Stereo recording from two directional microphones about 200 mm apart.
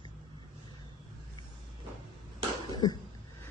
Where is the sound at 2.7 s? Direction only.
20° left (ahead or behind).